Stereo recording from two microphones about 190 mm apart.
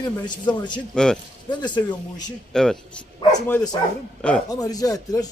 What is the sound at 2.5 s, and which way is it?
Speech, 5° left (ahead or behind).